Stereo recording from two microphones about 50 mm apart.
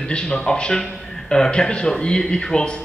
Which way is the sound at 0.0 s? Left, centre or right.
Centre.